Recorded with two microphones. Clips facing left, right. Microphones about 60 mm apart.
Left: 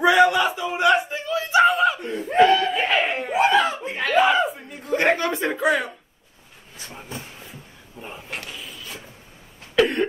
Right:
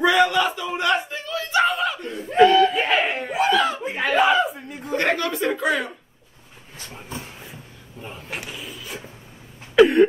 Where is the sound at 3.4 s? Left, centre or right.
Left.